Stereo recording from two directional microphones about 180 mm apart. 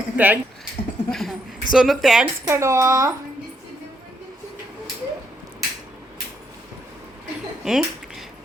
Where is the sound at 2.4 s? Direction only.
15° right (ahead or behind).